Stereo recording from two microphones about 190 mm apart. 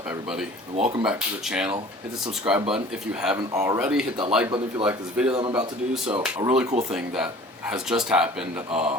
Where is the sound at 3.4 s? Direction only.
15° right (ahead or behind).